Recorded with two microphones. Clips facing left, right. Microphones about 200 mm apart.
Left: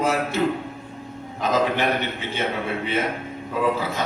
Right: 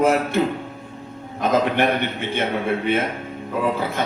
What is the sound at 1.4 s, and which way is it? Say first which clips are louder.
A man's voice: right 3 dB; 55° right (ahead or behind).